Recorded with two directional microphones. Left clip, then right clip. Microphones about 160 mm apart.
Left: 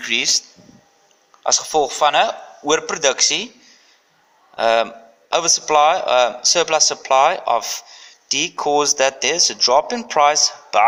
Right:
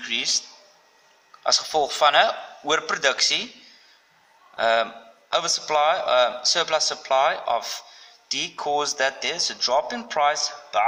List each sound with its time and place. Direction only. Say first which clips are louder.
0.0 s speech: left 6 dB; 40° left (ahead or behind)
1.5 s a man's voice: left 4 dB; 15° left (ahead or behind)
4.5 s speech: left 5 dB; 25° left (ahead or behind)